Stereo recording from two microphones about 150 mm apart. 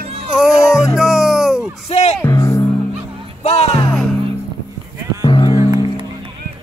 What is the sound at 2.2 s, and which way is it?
Music, 20° left (ahead or behind).